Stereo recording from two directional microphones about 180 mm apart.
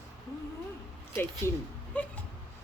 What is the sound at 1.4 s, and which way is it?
Speech, 15° left (ahead or behind).